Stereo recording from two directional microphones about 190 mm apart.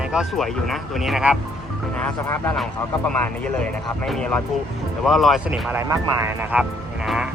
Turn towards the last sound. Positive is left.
turn(degrees=-5)  # may be behind; listen again after turning